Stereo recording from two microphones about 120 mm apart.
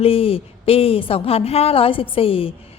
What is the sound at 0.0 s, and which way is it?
A woman's voice, 55° left (ahead or behind).